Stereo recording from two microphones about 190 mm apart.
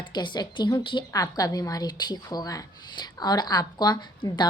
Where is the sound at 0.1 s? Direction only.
25° left (ahead or behind).